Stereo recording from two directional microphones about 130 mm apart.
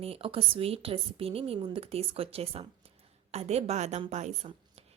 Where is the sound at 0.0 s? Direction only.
45° right (ahead or behind).